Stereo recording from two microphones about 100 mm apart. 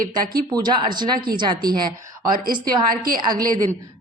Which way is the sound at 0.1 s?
45° right (ahead or behind).